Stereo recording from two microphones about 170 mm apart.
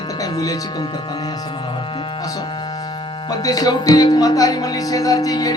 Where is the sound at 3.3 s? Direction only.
20° left (ahead or behind).